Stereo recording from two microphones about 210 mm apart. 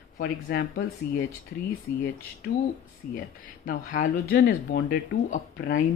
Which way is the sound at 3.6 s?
40° left (ahead or behind).